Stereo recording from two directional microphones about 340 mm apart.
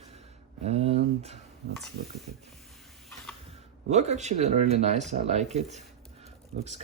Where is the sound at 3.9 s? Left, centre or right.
Centre.